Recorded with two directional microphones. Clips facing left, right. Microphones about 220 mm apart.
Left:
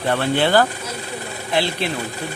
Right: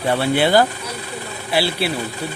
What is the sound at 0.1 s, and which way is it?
Speech, 10° right (ahead or behind).